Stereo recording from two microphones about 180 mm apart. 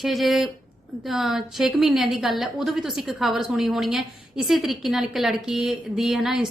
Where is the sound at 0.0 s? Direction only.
Centre (ahead or behind).